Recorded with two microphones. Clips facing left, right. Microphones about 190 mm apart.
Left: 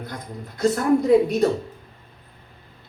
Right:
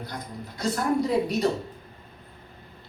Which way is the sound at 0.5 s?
50° left (ahead or behind).